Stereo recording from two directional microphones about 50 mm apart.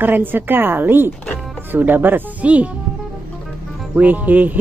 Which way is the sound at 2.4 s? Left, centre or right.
Right.